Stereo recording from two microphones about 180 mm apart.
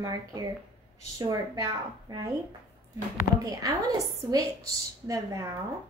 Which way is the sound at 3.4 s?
20° right (ahead or behind).